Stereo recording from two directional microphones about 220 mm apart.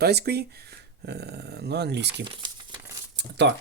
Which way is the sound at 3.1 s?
50° right (ahead or behind).